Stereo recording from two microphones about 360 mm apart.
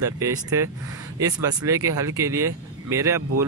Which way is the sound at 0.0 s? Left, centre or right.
Centre.